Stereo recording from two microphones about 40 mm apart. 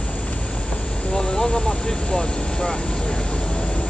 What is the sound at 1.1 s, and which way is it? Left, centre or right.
Speech, centre.